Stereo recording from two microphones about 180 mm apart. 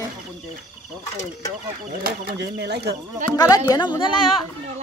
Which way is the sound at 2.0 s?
60° right (ahead or behind).